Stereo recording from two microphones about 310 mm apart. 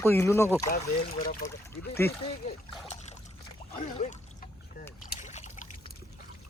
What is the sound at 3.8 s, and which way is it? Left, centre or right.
Trickle, left.